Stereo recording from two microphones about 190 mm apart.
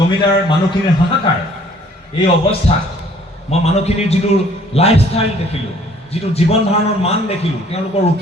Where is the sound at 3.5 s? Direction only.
35° left (ahead or behind).